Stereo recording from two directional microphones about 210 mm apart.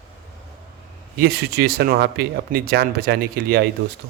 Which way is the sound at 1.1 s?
50° right (ahead or behind).